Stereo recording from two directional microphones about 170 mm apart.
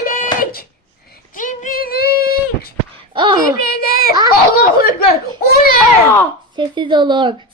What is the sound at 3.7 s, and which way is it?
Speech, 65° left (ahead or behind).